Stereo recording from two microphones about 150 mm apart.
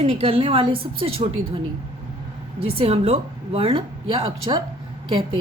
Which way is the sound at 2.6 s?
40° right (ahead or behind).